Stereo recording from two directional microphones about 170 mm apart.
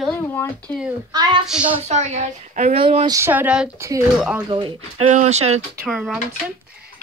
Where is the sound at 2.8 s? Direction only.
30° right (ahead or behind).